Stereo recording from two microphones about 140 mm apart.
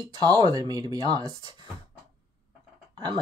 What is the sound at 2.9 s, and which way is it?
Speech, 30° right (ahead or behind).